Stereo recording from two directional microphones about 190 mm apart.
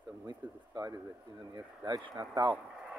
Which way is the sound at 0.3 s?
20° right (ahead or behind).